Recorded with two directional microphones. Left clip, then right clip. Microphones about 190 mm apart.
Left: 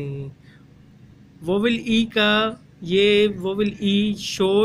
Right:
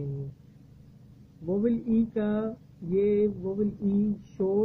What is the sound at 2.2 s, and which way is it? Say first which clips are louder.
Speech: left 12 dB; 35° left (ahead or behind).